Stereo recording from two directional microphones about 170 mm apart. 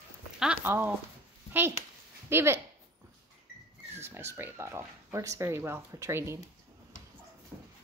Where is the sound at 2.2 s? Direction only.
15° right (ahead or behind).